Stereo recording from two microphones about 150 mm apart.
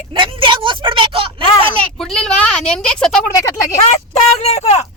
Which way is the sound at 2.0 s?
5° left (ahead or behind).